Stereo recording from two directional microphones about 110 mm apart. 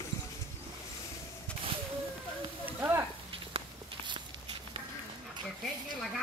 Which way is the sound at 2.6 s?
20° right (ahead or behind).